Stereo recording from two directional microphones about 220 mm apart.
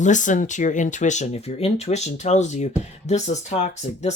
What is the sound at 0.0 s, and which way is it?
Speech, 35° left (ahead or behind).